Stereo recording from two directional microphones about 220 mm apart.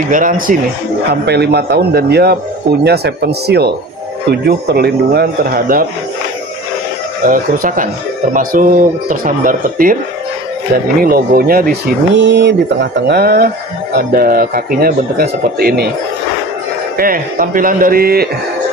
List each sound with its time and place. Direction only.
0.1 s a man's voice: 40° right (ahead or behind)
7.2 s speech: 40° right (ahead or behind)
11.0 s a man's voice: 40° right (ahead or behind)
12.2 s a man's voice: 50° right (ahead or behind)
16.9 s speech: 40° right (ahead or behind)